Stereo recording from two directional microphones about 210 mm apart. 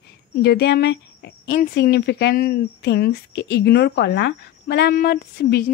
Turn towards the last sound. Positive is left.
turn(degrees=50)  # may be behind; listen again after turning